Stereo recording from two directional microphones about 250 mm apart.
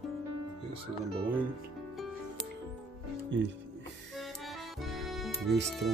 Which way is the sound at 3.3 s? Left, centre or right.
Right.